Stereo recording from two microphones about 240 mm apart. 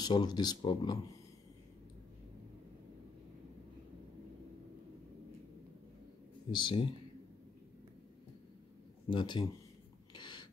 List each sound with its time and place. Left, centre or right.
0.0 s speech: centre
6.5 s speech: centre
9.1 s speech: centre
10.1 s a sound: centre